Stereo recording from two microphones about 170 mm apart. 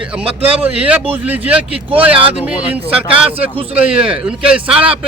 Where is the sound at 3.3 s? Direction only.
35° right (ahead or behind).